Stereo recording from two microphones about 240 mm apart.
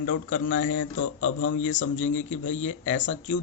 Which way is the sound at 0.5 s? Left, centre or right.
Left.